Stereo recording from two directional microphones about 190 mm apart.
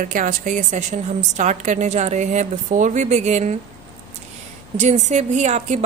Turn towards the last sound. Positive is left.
turn(degrees=-40)  # may be behind; listen again after turning